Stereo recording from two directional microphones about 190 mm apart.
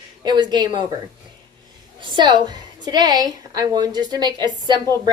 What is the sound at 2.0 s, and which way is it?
A woman's voice, 25° right (ahead or behind).